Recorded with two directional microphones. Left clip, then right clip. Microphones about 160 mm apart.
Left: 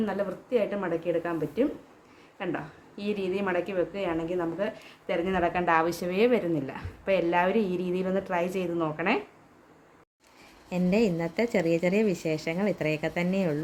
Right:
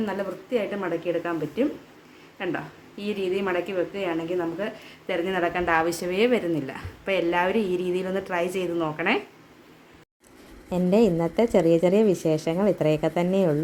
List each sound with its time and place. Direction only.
0.0 s a woman's voice: 5° left (ahead or behind)
10.7 s a woman's voice: 20° right (ahead or behind)